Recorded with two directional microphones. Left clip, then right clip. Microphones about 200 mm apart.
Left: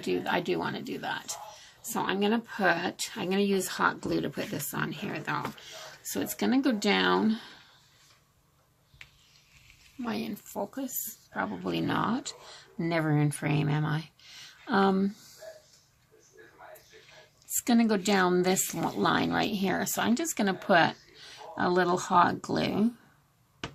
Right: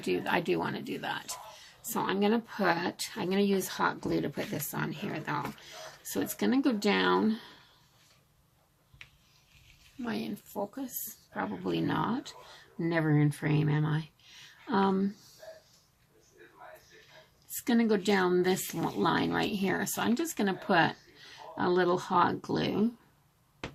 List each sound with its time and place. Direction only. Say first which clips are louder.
0.0 s speech: left 1 dB; 10° left (ahead or behind)
10.0 s speech: left 2 dB; 15° left (ahead or behind)
17.6 s speech: left 2 dB; 25° left (ahead or behind)